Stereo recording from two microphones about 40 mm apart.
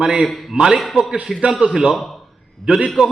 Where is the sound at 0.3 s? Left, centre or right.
Centre.